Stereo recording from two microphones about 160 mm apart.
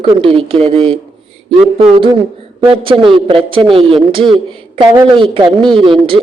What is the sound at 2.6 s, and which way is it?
A woman's voice, 30° right (ahead or behind).